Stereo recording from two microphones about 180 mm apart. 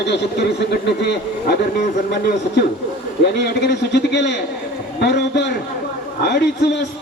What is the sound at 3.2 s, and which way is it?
A man's voice, 65° left (ahead or behind).